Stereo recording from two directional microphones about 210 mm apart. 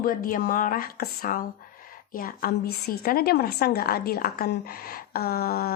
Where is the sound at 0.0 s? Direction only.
40° left (ahead or behind).